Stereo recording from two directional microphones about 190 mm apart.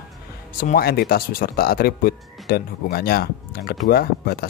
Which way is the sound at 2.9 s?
50° left (ahead or behind).